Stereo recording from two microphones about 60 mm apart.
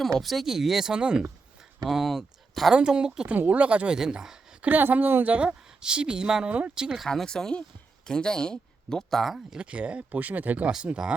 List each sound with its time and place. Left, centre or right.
0.0 s a woman's voice: centre
1.8 s speech: centre
2.7 s a woman's voice: centre
3.2 s speech: right
4.7 s a woman's voice: right; by 7.0 s centre
7.1 s speech: centre
9.6 s speech: right
10.8 s a woman's voice: centre